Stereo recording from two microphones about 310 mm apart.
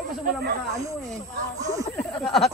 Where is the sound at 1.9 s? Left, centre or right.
Centre.